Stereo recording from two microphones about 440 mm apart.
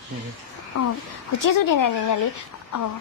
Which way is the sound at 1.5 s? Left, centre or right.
Left.